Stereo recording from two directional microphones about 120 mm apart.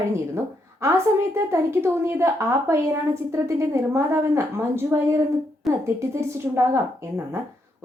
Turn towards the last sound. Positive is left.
turn(degrees=-20)  # may be behind; listen again after turning